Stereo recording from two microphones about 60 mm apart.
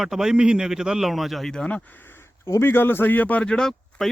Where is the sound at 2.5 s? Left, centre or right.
Left.